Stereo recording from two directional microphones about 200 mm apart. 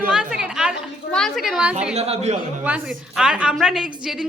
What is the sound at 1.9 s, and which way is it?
Speech, 30° right (ahead or behind).